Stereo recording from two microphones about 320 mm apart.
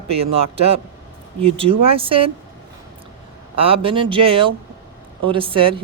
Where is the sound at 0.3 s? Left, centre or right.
Centre.